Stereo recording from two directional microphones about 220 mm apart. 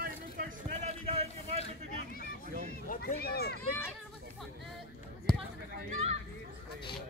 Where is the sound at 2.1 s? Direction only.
40° left (ahead or behind).